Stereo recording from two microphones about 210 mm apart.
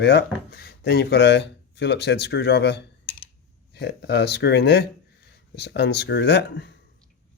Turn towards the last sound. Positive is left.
turn(degrees=50)  # may be behind; listen again after turning